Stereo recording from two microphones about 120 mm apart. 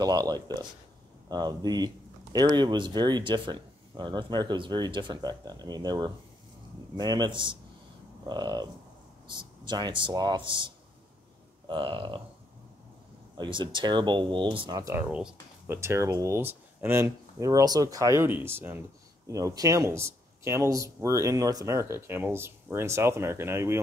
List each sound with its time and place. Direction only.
0.0 s speech: 35° right (ahead or behind)
11.6 s a sound: 40° right (ahead or behind)
13.4 s speech: 45° right (ahead or behind)
15.0 s speech: 10° right (ahead or behind)
15.7 s speech: 20° right (ahead or behind)